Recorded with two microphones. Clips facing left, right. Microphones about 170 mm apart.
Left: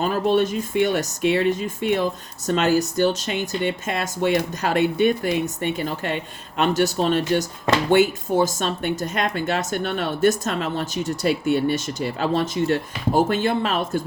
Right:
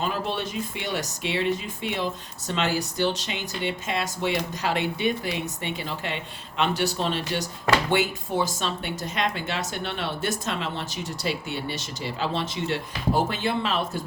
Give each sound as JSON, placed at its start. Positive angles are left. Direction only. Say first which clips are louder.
{"t": 0.0, "sound": "speech", "louder": "left 9 dB", "side_deg": 50}